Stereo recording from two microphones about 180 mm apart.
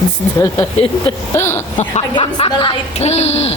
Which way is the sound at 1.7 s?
35° left (ahead or behind).